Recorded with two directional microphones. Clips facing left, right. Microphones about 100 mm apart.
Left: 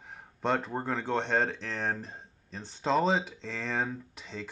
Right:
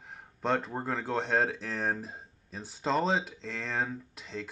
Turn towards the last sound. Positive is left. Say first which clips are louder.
# right 1 dB
turn(degrees=0)  # may be behind; listen again after turning